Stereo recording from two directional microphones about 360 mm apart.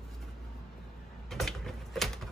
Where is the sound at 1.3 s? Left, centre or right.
Centre.